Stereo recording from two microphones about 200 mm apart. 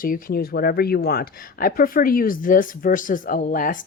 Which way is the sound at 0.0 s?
45° left (ahead or behind).